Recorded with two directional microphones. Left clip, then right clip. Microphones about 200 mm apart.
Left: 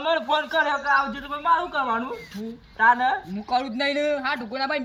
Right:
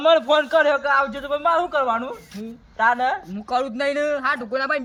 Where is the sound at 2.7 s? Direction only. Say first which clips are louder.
Even; 25° right (ahead or behind).